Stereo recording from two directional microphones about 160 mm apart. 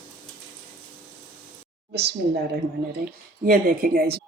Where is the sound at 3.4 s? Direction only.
65° right (ahead or behind).